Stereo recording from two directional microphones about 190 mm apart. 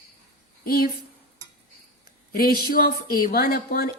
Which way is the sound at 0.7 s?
50° left (ahead or behind).